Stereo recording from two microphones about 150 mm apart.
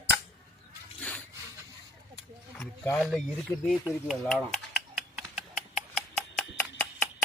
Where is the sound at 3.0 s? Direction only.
Centre (ahead or behind).